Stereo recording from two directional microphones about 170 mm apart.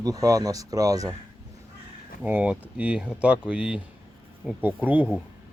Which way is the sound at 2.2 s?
10° right (ahead or behind).